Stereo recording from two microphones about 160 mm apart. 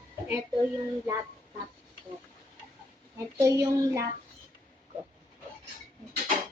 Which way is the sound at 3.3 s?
20° right (ahead or behind).